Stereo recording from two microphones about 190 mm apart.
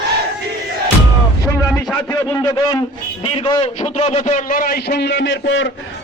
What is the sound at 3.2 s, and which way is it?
A man's voice, 25° left (ahead or behind).